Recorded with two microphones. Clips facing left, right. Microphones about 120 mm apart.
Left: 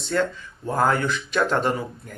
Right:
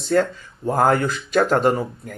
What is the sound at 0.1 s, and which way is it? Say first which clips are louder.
Speech: right 5 dB; 40° right (ahead or behind).